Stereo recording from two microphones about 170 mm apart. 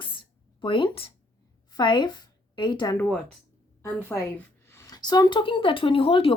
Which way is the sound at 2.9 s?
10° left (ahead or behind).